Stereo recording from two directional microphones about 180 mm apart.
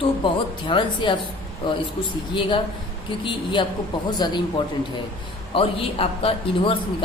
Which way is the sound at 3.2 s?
25° left (ahead or behind).